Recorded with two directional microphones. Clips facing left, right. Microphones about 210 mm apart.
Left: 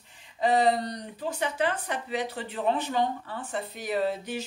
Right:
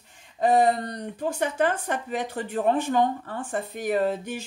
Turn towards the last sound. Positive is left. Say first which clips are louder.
# right 3 dB
turn(degrees=-50)  # may be behind; listen again after turning